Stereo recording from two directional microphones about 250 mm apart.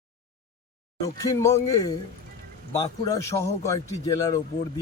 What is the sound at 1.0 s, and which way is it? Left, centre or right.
Speech, centre.